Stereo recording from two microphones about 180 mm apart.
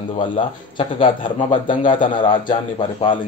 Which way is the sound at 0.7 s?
30° left (ahead or behind).